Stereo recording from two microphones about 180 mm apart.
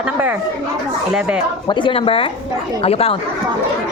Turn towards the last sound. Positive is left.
turn(degrees=35)  # may be behind; listen again after turning